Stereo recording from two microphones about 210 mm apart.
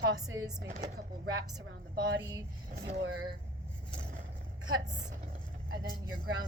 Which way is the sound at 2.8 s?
55° right (ahead or behind).